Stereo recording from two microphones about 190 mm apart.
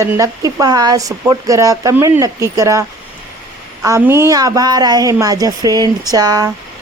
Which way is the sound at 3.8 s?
15° right (ahead or behind).